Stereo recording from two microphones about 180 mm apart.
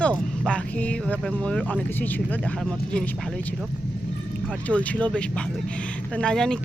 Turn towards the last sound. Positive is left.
turn(degrees=5)  # may be behind; listen again after turning